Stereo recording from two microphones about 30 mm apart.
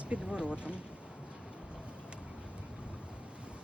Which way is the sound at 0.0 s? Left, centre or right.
Right.